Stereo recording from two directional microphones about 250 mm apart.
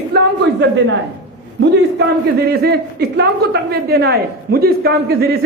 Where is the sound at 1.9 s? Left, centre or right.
Right.